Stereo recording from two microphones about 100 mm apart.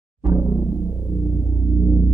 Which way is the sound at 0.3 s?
30° right (ahead or behind).